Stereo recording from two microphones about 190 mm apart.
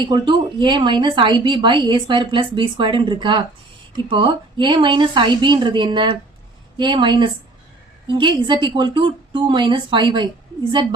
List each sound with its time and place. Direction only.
0.0 s a woman's voice: 25° right (ahead or behind)